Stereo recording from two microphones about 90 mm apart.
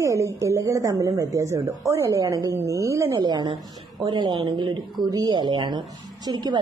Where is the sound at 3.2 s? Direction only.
55° right (ahead or behind).